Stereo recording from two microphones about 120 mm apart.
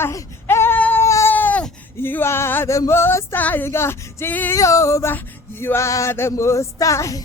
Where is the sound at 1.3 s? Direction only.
15° left (ahead or behind).